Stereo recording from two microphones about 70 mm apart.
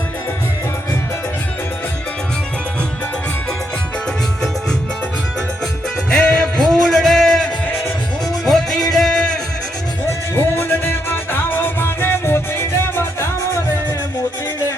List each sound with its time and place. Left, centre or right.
6.1 s music: centre
8.4 s music: centre
10.3 s music: left